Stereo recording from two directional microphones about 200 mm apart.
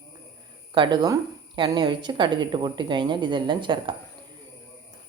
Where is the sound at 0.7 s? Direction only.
20° right (ahead or behind).